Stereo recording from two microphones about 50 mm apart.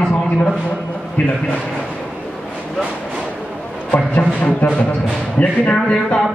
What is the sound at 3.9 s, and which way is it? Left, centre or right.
Music, left.